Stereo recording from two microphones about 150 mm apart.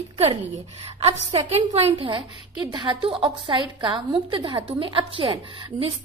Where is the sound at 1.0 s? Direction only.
45° right (ahead or behind).